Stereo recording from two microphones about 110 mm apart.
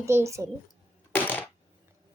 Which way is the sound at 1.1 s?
15° left (ahead or behind).